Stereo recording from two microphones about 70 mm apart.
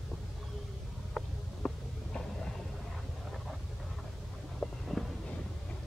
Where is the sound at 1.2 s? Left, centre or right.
Centre.